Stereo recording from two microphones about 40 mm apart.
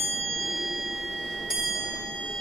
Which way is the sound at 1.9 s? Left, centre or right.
Centre.